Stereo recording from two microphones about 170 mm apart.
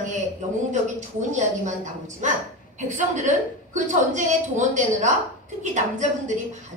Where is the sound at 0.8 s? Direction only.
45° right (ahead or behind).